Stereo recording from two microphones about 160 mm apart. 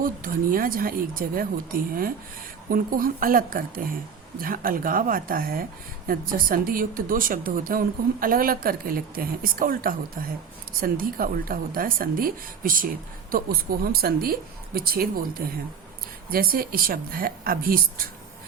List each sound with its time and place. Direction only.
0.0 s a woman's voice: 60° right (ahead or behind)